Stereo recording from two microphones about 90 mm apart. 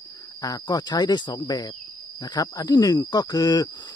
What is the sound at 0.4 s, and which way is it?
Speech, 45° left (ahead or behind).